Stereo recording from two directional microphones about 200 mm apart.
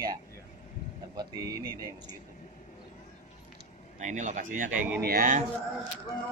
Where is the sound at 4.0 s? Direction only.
35° right (ahead or behind).